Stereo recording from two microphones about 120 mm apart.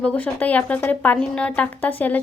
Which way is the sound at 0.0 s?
10° left (ahead or behind).